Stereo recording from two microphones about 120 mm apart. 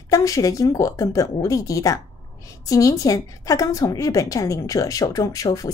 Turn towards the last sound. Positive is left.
turn(degrees=30)  # may be behind; listen again after turning